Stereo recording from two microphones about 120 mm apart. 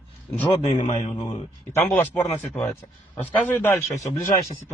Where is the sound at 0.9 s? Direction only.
60° left (ahead or behind).